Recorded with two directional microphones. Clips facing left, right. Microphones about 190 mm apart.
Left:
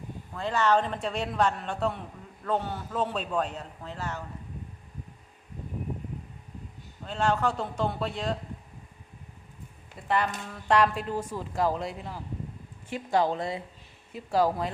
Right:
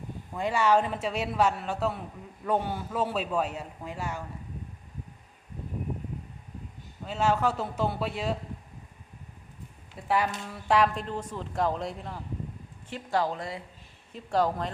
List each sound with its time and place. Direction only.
0.3 s a man's voice: 10° right (ahead or behind)
7.0 s a man's voice: 5° right (ahead or behind)
10.1 s speech: 5° right (ahead or behind)
12.9 s speech: 20° left (ahead or behind)
14.1 s speech: 5° left (ahead or behind)